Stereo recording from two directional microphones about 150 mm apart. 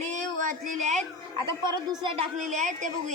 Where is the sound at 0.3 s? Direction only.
55° right (ahead or behind).